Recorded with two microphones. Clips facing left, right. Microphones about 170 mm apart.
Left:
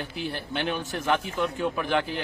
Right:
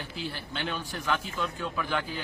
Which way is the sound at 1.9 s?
65° left (ahead or behind).